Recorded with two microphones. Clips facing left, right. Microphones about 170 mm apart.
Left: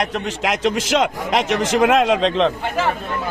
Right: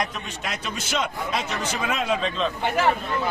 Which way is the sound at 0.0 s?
80° left.